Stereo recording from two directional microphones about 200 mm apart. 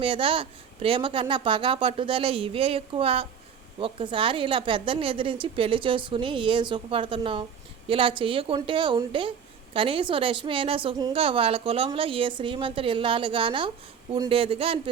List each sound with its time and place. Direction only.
0.0 s a woman's voice: 25° right (ahead or behind)